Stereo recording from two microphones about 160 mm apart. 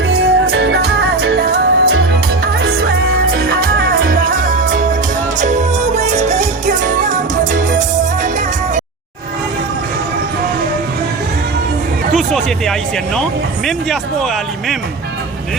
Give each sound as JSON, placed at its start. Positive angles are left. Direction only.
{"t": 0.1, "sound": "music", "side_deg": -90}
{"t": 3.3, "sound": "music", "side_deg": -70}
{"t": 12.1, "sound": "music", "side_deg": 0}
{"t": 13.7, "sound": "speech", "side_deg": 0}